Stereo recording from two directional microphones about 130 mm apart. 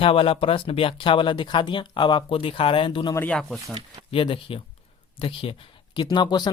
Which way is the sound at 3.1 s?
10° left (ahead or behind).